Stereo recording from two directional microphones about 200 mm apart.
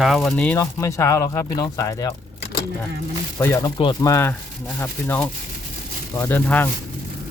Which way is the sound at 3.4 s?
15° left (ahead or behind).